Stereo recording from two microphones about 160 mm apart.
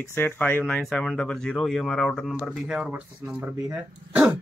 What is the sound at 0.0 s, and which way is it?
Speech, 15° left (ahead or behind).